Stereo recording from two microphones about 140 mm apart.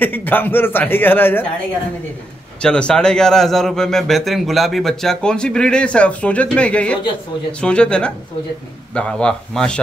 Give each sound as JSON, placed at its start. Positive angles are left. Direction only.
{"t": 0.0, "sound": "a man's voice", "side_deg": 15}
{"t": 2.6, "sound": "a man's voice", "side_deg": 5}